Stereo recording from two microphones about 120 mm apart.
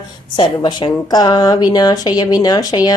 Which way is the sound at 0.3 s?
40° left (ahead or behind).